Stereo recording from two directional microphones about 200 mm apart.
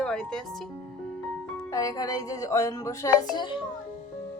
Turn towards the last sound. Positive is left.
turn(degrees=15)  # may be behind; listen again after turning